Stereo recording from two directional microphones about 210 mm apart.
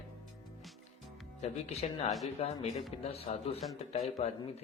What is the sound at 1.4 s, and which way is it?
Speech, 30° left (ahead or behind).